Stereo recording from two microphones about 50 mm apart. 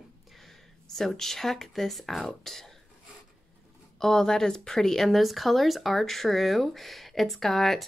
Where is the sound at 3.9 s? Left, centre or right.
Centre.